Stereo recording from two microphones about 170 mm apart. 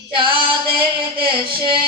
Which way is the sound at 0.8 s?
30° right (ahead or behind).